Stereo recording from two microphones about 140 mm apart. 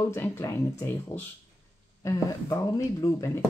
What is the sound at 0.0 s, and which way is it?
Speech, 15° left (ahead or behind).